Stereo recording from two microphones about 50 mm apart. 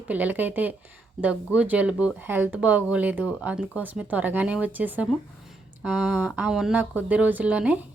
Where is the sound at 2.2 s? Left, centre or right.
Right.